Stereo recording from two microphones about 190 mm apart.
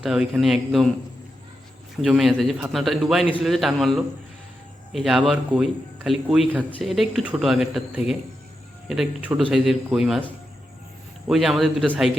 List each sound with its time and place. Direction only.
0.0 s speech: centre (ahead or behind)
2.0 s speech: centre (ahead or behind)